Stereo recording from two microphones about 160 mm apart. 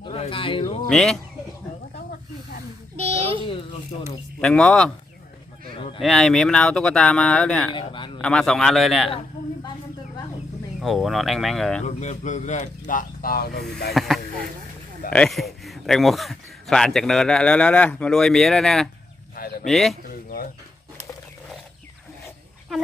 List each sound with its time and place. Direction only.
0.0 s speech: 35° left (ahead or behind)
0.8 s a man's voice: 5° left (ahead or behind)
3.0 s a child's voice: 40° right (ahead or behind)
3.4 s a child's voice: 35° left (ahead or behind)
4.4 s a man's voice: 5° left (ahead or behind)
5.9 s a man's voice: centre (ahead or behind)
7.7 s a child's voice: 30° left (ahead or behind)
8.2 s a man's voice: 5° left (ahead or behind)
10.8 s a man's voice: centre (ahead or behind)
11.8 s speech: 45° left (ahead or behind); by 13.7 s 70° left (ahead or behind)
13.8 s a man's voice: centre (ahead or behind)